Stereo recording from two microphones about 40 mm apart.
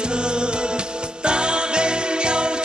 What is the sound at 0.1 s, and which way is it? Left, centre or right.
Music, right.